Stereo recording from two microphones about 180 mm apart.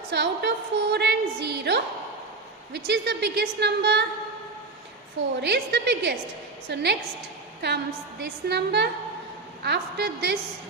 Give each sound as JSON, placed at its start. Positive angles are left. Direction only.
{"t": 0.1, "sound": "a woman's voice", "side_deg": -70}
{"t": 5.4, "sound": "a woman's voice", "side_deg": -70}